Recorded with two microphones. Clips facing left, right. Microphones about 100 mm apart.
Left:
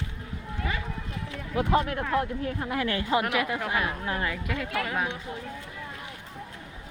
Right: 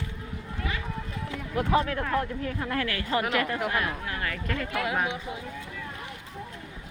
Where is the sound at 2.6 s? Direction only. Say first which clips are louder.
Left 2 dB; 20° left (ahead or behind).